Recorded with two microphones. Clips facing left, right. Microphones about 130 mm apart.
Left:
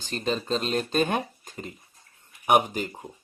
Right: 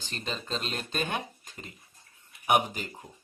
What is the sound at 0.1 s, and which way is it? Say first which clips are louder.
Speech: left 8 dB; 40° left (ahead or behind).